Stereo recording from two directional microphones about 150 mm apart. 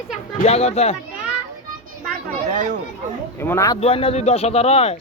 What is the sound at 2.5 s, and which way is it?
Speech, 60° right (ahead or behind).